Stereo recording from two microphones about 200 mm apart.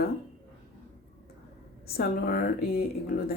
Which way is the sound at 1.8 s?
50° left (ahead or behind).